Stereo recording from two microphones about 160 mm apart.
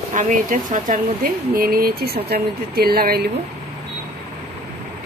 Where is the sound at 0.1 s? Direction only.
55° right (ahead or behind); by 3.3 s 70° right (ahead or behind).